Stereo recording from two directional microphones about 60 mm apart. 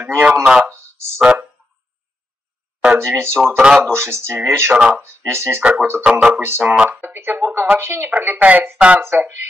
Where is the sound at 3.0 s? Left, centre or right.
Right.